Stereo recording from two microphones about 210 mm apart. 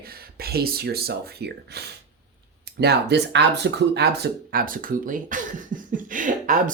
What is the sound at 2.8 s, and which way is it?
Speech, 50° right (ahead or behind).